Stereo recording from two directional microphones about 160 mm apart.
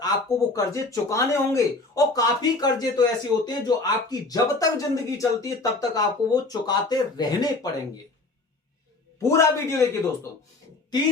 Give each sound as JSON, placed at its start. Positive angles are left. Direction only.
{"t": 0.0, "sound": "speech", "side_deg": 20}
{"t": 9.2, "sound": "a man's voice", "side_deg": 15}